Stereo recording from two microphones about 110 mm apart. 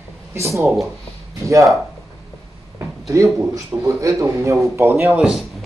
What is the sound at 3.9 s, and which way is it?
Speech, 30° right (ahead or behind).